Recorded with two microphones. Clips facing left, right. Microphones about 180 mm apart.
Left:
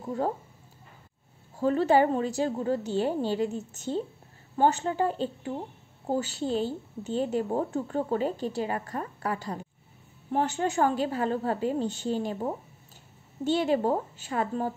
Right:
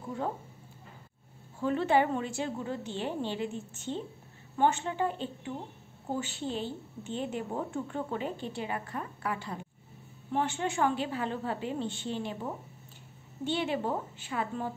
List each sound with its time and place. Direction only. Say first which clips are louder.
1.6 s a woman's voice: left 4 dB; 40° left (ahead or behind)